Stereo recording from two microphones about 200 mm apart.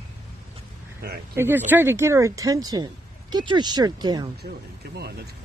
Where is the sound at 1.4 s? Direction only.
10° right (ahead or behind).